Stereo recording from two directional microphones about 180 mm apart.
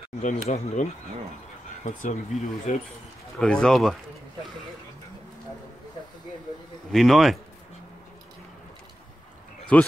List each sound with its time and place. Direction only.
0.2 s speech: 40° left (ahead or behind)
1.9 s speech: 45° left (ahead or behind)
3.3 s speech: 5° left (ahead or behind)
6.9 s speech: centre (ahead or behind)
9.7 s speech: 5° left (ahead or behind)